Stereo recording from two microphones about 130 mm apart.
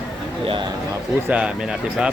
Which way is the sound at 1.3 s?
10° right (ahead or behind).